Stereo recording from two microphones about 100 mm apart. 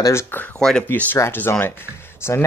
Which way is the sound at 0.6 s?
5° left (ahead or behind).